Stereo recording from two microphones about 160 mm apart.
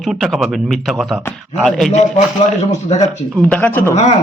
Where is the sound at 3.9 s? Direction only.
45° left (ahead or behind).